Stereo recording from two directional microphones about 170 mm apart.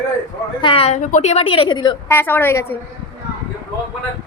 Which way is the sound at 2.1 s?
10° left (ahead or behind).